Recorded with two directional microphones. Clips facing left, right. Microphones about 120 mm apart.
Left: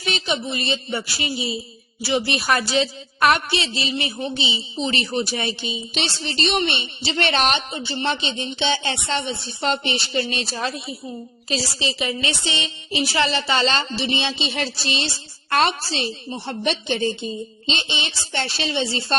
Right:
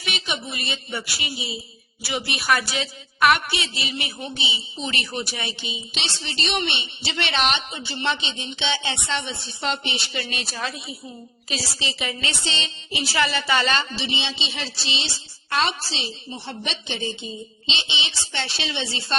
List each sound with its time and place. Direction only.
0.0 s a woman's voice: 30° left (ahead or behind)
13.9 s a woman's voice: 45° left (ahead or behind)